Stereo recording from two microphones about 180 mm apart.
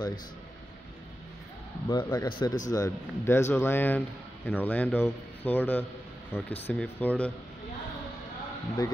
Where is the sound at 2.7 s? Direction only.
15° left (ahead or behind).